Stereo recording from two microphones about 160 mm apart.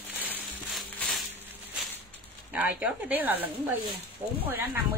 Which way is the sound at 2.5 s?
10° right (ahead or behind).